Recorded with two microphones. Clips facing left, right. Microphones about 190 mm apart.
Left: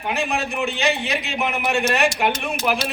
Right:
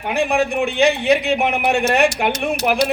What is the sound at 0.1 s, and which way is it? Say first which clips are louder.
Speech: right 6 dB; 55° right (ahead or behind).